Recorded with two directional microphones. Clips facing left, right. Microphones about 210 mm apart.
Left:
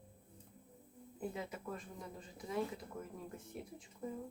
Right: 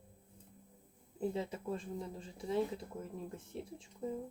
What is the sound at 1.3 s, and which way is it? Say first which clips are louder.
Speech: right 6 dB; 30° right (ahead or behind).